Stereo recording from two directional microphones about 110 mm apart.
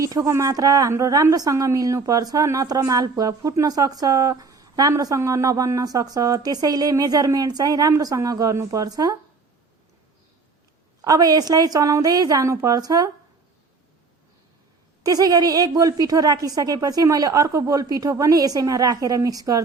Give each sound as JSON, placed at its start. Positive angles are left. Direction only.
{"t": 0.0, "sound": "a woman's voice", "side_deg": -30}
{"t": 11.0, "sound": "a woman's voice", "side_deg": -35}
{"t": 15.0, "sound": "a woman's voice", "side_deg": -35}